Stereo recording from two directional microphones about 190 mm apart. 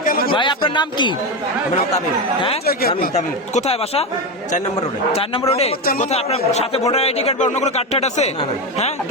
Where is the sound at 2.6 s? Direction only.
50° left (ahead or behind).